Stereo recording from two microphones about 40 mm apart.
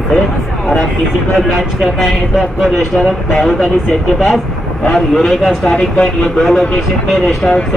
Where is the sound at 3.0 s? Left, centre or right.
Centre.